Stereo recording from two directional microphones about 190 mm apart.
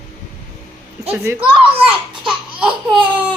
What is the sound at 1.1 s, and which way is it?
Speech, 15° right (ahead or behind).